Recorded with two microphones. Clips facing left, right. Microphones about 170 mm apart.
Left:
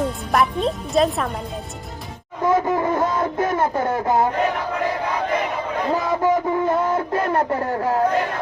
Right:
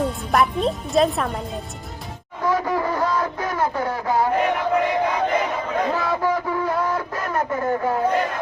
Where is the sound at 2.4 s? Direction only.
20° left (ahead or behind).